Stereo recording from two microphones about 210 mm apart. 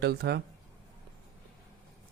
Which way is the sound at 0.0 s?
50° right (ahead or behind).